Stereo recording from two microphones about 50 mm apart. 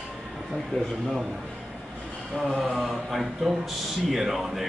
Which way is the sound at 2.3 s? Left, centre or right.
Centre.